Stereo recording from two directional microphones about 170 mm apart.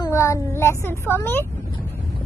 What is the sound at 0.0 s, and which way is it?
A woman's voice, 15° left (ahead or behind).